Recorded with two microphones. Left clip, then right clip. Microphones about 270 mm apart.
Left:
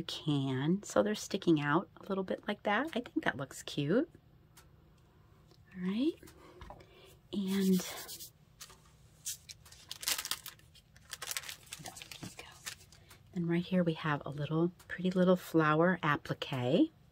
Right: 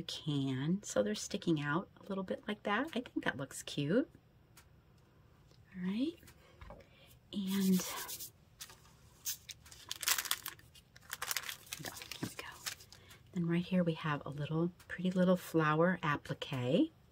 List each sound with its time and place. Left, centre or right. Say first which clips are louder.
0.0 s speech: left 3 dB; centre
5.8 s speech: left 4 dB; centre
7.2 s speech: left 3 dB; centre
9.8 s a sound: right 1 dB; centre
13.3 s speech: left 3 dB; centre